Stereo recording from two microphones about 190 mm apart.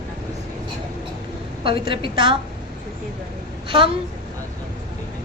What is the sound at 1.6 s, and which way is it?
Speech, 25° right (ahead or behind).